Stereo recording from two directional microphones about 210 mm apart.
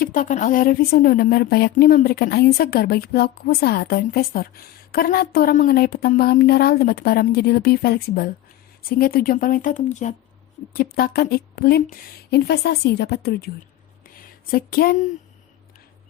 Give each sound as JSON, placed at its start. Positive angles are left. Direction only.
{"t": 0.0, "sound": "speech", "side_deg": 40}
{"t": 14.5, "sound": "speech", "side_deg": 45}